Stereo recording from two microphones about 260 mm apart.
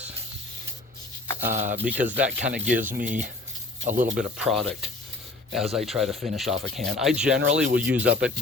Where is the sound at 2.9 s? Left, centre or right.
Right.